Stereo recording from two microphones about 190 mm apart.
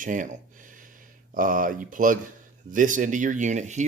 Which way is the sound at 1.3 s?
45° right (ahead or behind).